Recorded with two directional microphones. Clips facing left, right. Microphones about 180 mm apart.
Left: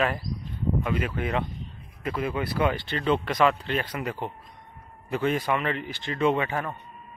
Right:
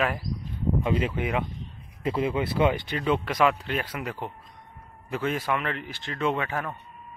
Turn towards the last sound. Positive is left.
turn(degrees=0)  # may be behind; listen again after turning